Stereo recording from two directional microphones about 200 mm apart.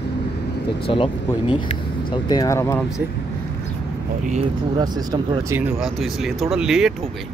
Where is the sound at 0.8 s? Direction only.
25° left (ahead or behind).